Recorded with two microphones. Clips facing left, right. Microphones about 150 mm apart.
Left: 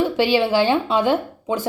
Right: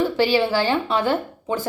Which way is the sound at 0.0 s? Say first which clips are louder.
Left 1 dB; 15° left (ahead or behind).